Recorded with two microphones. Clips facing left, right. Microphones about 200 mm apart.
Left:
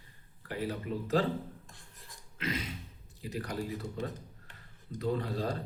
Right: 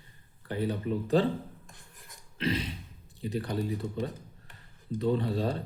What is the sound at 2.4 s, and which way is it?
Speech, 35° right (ahead or behind).